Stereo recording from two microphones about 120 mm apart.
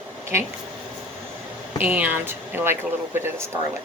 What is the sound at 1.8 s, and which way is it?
A woman's voice, 15° right (ahead or behind).